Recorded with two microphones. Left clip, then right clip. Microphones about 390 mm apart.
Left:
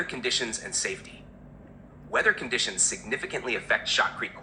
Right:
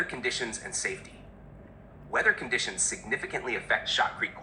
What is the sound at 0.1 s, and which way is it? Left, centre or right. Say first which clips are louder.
Speech: left 3 dB; centre.